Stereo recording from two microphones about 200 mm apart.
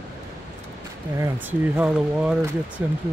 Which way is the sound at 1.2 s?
10° right (ahead or behind).